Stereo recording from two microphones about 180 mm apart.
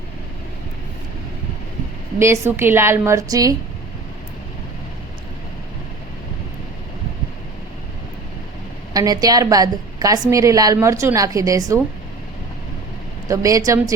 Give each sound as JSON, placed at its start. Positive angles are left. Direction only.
{"t": 2.1, "sound": "a woman's voice", "side_deg": -15}
{"t": 8.9, "sound": "a woman's voice", "side_deg": -20}
{"t": 13.2, "sound": "a woman's voice", "side_deg": -20}